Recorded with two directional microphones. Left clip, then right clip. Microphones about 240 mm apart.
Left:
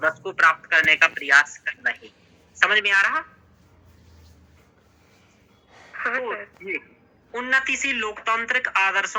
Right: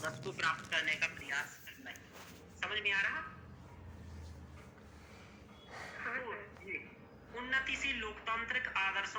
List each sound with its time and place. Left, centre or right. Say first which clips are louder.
0.0 s a man's voice: left 18 dB; left
6.0 s a man's voice: left 16 dB; left